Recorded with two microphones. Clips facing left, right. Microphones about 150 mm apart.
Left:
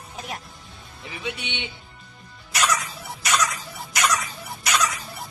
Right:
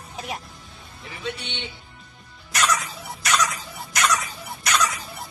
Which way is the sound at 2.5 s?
Centre (ahead or behind).